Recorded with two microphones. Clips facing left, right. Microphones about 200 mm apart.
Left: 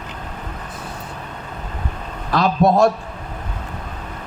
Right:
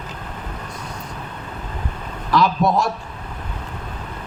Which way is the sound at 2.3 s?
55° left (ahead or behind).